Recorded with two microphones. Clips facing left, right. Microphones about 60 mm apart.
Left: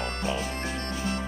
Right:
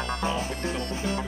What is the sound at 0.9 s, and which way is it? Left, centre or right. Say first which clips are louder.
Music: right 1 dB; right.